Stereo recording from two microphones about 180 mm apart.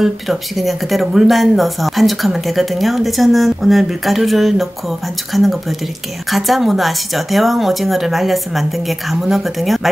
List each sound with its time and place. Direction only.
0.0 s speech: centre (ahead or behind)